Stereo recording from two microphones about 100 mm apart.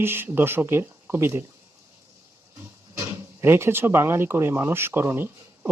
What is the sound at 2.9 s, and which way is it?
Speech, 25° right (ahead or behind).